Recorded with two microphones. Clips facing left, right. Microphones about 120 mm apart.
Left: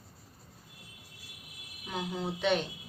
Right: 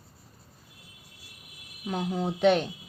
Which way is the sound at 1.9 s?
45° right (ahead or behind).